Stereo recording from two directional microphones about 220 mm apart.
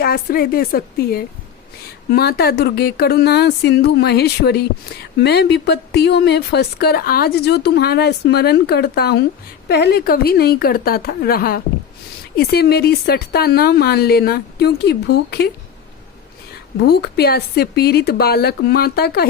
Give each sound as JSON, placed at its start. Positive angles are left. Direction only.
{"t": 0.0, "sound": "speech", "side_deg": 45}
{"t": 16.8, "sound": "speech", "side_deg": 45}